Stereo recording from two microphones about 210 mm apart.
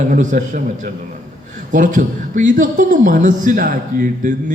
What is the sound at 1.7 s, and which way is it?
A man's voice, 35° right (ahead or behind).